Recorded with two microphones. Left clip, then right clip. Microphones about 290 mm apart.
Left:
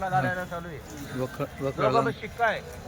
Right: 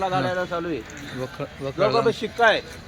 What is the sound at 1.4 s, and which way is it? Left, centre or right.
Speech, centre.